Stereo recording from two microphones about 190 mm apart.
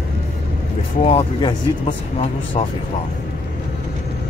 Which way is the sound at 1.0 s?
30° left (ahead or behind).